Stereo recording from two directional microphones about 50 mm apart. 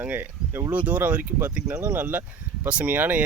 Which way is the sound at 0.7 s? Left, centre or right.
Right.